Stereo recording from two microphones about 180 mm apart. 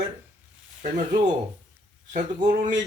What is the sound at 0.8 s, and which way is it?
A man's voice, 45° right (ahead or behind).